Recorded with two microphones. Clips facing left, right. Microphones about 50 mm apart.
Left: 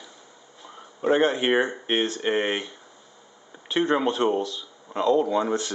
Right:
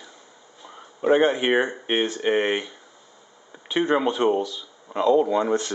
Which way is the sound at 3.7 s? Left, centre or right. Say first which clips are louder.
Right 1 dB; centre.